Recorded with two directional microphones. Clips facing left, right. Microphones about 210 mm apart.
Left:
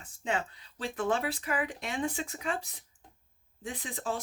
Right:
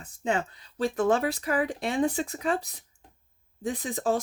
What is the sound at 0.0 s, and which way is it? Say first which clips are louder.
Speech: right 5 dB; 40° right (ahead or behind).